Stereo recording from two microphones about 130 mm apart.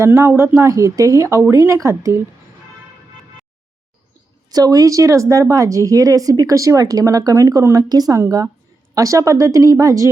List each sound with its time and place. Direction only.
0.0 s speech: 20° right (ahead or behind)
4.5 s speech: 30° right (ahead or behind)